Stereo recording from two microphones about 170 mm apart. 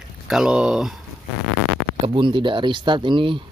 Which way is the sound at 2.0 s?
30° right (ahead or behind).